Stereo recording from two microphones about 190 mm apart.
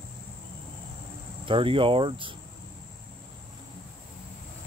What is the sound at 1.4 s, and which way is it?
Speech, 25° right (ahead or behind).